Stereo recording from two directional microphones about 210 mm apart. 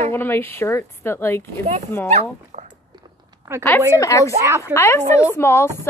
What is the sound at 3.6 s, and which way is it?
Speech, 10° left (ahead or behind).